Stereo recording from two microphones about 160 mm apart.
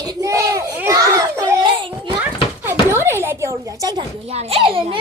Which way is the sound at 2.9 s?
15° right (ahead or behind).